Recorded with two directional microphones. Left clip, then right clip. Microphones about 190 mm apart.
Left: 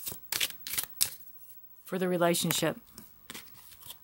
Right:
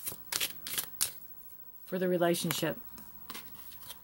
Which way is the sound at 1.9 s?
50° left (ahead or behind).